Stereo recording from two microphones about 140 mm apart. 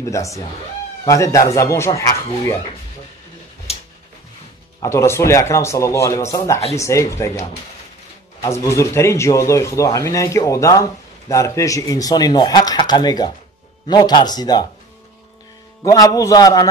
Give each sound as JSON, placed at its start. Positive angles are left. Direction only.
{"t": 0.0, "sound": "speech", "side_deg": 20}
{"t": 3.7, "sound": "a sound", "side_deg": 45}
{"t": 4.8, "sound": "speech", "side_deg": 20}
{"t": 15.8, "sound": "speech", "side_deg": 25}